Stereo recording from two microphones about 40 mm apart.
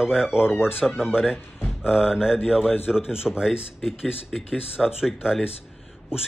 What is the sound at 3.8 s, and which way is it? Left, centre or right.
A man's voice, centre.